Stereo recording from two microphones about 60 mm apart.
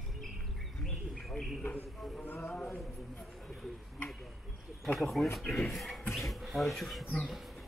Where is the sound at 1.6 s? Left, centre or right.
Left.